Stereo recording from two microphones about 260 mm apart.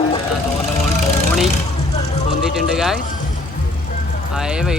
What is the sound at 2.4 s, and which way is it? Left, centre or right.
Music, centre.